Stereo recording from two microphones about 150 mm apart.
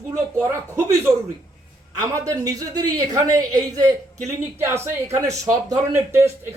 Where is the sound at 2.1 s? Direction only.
20° right (ahead or behind).